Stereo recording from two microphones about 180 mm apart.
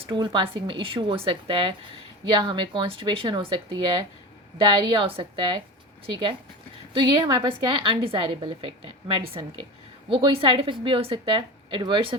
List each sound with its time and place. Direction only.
0.0 s a woman's voice: 25° right (ahead or behind)
6.9 s a woman's voice: 25° right (ahead or behind)